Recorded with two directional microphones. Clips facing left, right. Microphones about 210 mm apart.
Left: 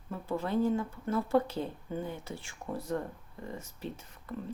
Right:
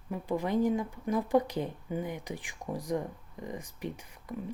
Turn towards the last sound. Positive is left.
turn(degrees=-15)  # may be behind; listen again after turning